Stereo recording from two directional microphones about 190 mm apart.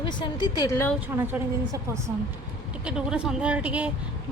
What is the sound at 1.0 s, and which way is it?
A woman's voice, 10° right (ahead or behind).